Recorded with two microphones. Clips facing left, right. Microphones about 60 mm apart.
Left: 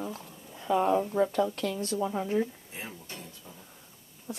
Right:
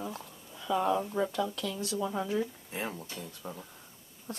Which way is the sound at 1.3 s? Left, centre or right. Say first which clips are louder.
Left 4 dB; left.